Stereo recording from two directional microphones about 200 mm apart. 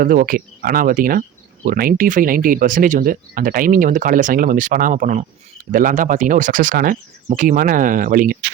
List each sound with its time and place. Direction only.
0.0 s speech: 45° right (ahead or behind)